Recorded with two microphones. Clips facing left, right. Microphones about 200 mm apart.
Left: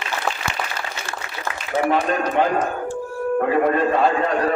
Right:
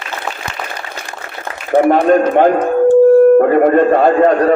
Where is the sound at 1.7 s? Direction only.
55° right (ahead or behind).